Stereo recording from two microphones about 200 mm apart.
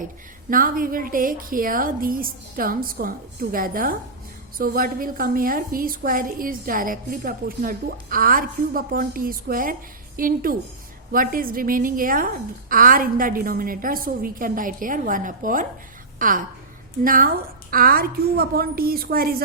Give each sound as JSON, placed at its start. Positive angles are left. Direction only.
{"t": 0.5, "sound": "a woman's voice", "side_deg": -45}